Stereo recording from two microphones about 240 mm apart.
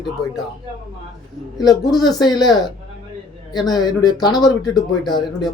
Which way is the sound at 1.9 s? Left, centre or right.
Centre.